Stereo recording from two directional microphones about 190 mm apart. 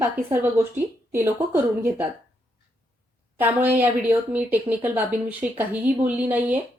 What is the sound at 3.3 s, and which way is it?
A woman's voice, 10° right (ahead or behind).